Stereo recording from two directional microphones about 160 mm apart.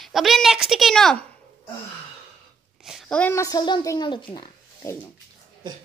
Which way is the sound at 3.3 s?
25° left (ahead or behind).